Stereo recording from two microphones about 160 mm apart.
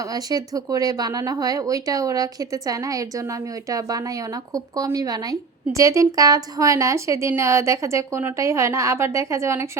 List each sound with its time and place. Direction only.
0.0 s speech: 25° right (ahead or behind)